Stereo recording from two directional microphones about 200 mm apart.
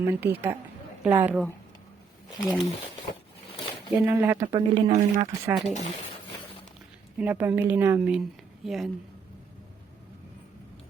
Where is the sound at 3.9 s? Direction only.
10° right (ahead or behind); by 5.0 s 25° right (ahead or behind).